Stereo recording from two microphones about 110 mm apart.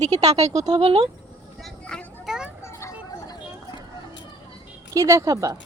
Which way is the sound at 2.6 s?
30° left (ahead or behind).